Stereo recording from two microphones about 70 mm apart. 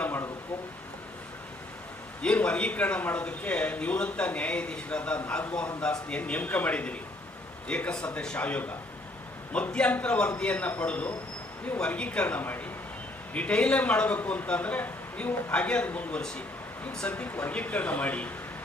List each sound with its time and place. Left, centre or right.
2.2 s a man's voice: centre